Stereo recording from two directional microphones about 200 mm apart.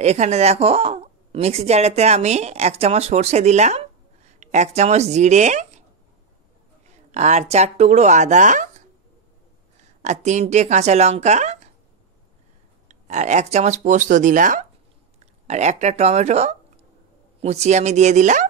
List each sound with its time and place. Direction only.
0.0 s a woman's voice: 35° right (ahead or behind)
6.9 s a woman's voice: 35° right (ahead or behind)
12.8 s speech: 35° right (ahead or behind)